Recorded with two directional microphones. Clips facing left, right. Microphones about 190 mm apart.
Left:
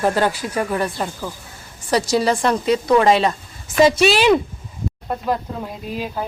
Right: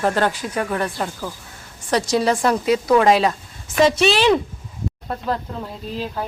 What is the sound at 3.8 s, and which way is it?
Speech, 10° left (ahead or behind).